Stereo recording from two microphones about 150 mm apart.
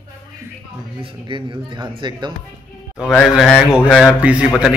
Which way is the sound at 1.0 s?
35° right (ahead or behind).